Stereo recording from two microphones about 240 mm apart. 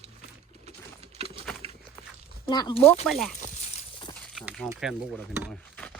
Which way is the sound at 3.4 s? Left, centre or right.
Left.